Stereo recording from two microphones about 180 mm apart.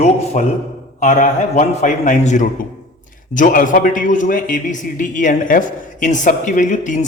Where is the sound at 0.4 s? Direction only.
45° left (ahead or behind).